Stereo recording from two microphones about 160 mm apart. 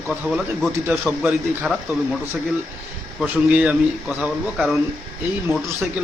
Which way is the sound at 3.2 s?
5° right (ahead or behind).